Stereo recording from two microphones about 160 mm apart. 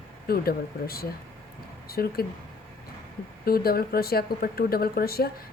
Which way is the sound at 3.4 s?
70° left (ahead or behind).